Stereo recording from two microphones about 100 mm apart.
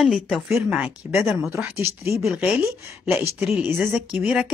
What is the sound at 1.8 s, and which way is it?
Speech, 30° right (ahead or behind).